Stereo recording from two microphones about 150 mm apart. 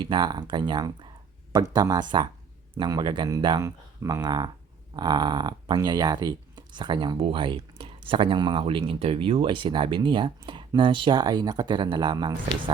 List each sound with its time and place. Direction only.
0.0 s speech: 30° right (ahead or behind)